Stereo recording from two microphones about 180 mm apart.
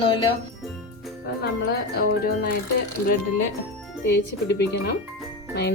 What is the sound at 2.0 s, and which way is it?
Speech, 60° left (ahead or behind).